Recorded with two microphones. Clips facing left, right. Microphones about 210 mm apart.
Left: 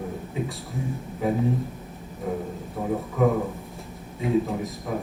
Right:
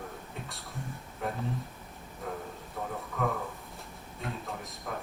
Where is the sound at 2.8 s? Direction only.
15° left (ahead or behind).